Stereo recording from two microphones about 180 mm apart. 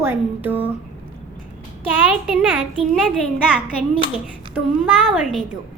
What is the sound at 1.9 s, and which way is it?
A child's voice, 10° right (ahead or behind).